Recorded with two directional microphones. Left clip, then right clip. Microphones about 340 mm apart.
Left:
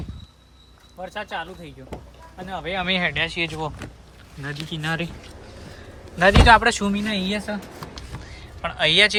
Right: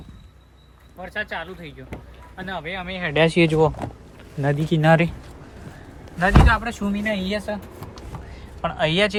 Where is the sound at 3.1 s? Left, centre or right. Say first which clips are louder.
Right 7 dB; centre.